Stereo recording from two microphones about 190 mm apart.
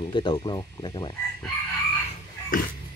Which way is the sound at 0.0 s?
25° left (ahead or behind).